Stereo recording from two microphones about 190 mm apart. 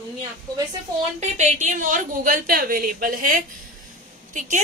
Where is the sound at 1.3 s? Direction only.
40° right (ahead or behind).